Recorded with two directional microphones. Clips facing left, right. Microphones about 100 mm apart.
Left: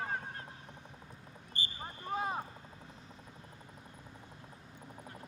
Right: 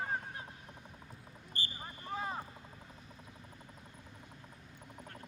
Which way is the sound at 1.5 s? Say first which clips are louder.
Left 1 dB; 20° left (ahead or behind).